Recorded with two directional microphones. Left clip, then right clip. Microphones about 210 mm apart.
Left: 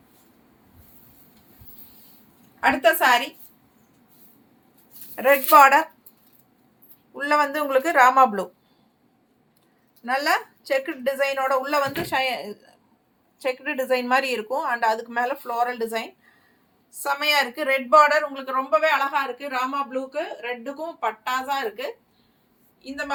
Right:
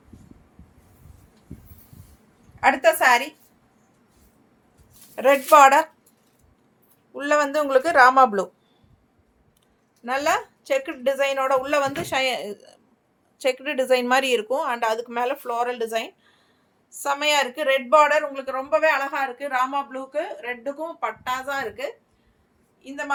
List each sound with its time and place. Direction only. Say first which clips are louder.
2.6 s speech: right 1 dB; 20° right (ahead or behind)
5.1 s speech: even; 40° right (ahead or behind)
7.1 s speech: even; 30° right (ahead or behind)
10.0 s a woman's voice: even; 30° right (ahead or behind); by 23.1 s 15° right (ahead or behind)